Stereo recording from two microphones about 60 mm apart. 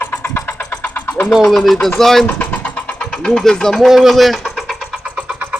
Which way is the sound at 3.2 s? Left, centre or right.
Centre.